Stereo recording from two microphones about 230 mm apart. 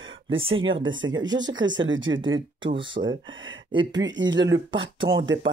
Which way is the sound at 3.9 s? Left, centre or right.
Right.